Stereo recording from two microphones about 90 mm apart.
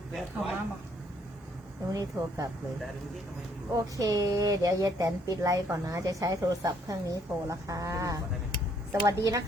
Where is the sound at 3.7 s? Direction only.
40° right (ahead or behind).